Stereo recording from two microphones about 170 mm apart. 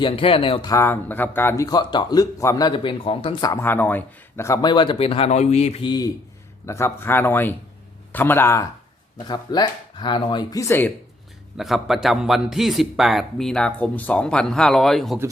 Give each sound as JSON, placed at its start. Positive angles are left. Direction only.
{"t": 0.0, "sound": "speech", "side_deg": 30}
{"t": 0.7, "sound": "speech", "side_deg": 15}
{"t": 3.5, "sound": "speech", "side_deg": 15}
{"t": 6.7, "sound": "speech", "side_deg": 15}
{"t": 11.5, "sound": "a man's voice", "side_deg": 0}